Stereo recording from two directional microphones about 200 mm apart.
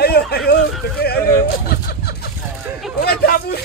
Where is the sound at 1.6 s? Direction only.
50° left (ahead or behind).